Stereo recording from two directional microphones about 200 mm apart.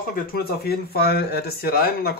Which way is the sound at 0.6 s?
55° left (ahead or behind).